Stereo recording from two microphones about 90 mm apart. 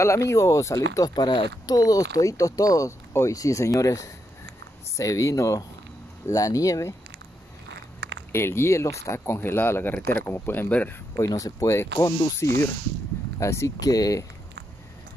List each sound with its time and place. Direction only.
0.0 s speech: 35° left (ahead or behind)
8.3 s speech: 30° left (ahead or behind)
11.1 s speech: 40° left (ahead or behind)
12.0 s speech: 45° left (ahead or behind)
13.4 s speech: 35° left (ahead or behind)